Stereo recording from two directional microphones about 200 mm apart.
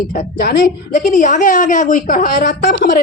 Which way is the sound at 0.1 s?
45° left (ahead or behind).